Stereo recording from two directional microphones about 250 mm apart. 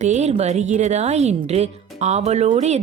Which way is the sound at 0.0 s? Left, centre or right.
Right.